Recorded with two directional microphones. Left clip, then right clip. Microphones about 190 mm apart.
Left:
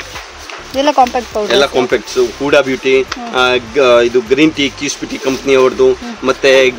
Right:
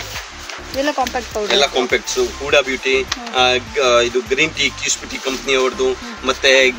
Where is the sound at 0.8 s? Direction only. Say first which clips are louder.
Left 9 dB; 10° left (ahead or behind).